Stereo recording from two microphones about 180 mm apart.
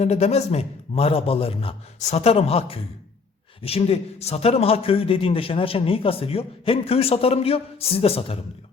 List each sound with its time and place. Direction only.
0.0 s a man's voice: 35° left (ahead or behind)